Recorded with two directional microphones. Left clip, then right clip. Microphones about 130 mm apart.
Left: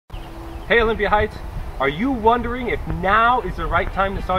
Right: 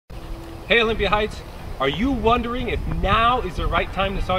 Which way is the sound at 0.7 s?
15° right (ahead or behind).